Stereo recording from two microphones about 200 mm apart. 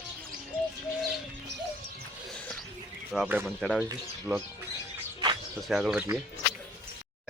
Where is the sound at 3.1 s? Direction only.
5° right (ahead or behind).